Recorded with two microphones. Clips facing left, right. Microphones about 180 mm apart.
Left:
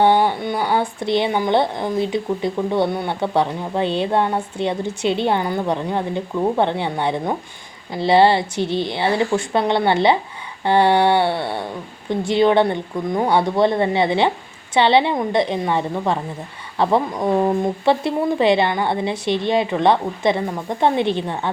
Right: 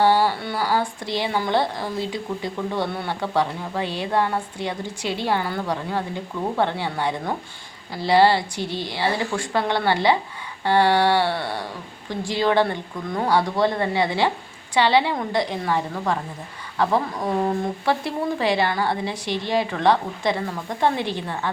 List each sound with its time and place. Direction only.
0.0 s speech: 20° left (ahead or behind)